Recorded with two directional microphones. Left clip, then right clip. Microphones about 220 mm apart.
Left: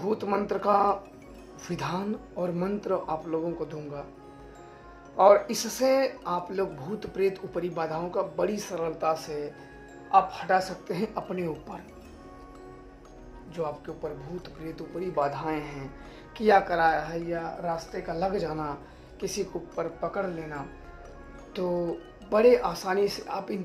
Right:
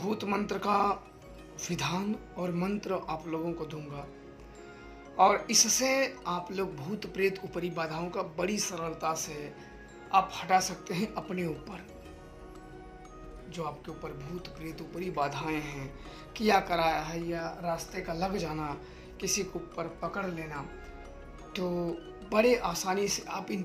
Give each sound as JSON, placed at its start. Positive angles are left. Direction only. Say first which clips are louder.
{"t": 0.0, "sound": "speech", "louder": "left 5 dB", "side_deg": -30}
{"t": 5.1, "sound": "speech", "louder": "left 4 dB", "side_deg": -30}
{"t": 13.6, "sound": "speech", "louder": "left 6 dB", "side_deg": -30}
{"t": 21.5, "sound": "speech", "louder": "left 4 dB", "side_deg": -25}